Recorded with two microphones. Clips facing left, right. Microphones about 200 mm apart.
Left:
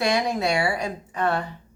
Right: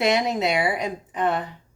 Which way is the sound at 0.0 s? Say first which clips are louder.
Right 1 dB; 20° right (ahead or behind).